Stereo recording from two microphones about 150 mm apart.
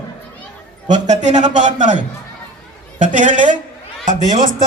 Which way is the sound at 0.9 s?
55° right (ahead or behind).